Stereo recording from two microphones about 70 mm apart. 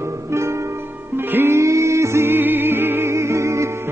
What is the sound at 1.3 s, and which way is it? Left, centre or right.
Music, right.